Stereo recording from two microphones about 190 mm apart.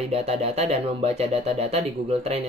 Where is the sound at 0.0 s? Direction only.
35° right (ahead or behind).